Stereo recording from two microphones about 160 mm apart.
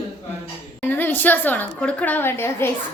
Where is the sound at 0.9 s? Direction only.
15° left (ahead or behind).